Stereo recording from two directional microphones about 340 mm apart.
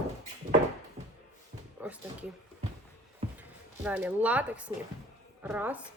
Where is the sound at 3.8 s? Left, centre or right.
Centre.